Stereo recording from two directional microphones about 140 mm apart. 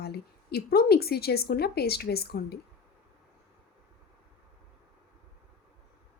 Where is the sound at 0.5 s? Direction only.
90° left.